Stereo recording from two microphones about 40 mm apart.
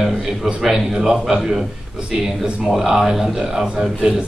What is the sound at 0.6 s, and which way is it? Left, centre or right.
Speech, centre.